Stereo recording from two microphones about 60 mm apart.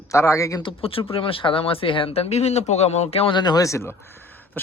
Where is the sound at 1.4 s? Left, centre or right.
Left.